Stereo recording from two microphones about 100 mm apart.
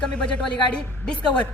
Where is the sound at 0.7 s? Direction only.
10° left (ahead or behind).